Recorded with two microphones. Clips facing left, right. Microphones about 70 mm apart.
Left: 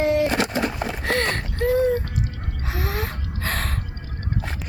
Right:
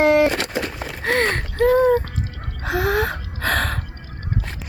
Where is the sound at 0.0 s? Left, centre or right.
Right.